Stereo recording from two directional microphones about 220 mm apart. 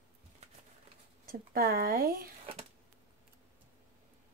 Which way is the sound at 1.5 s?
40° right (ahead or behind).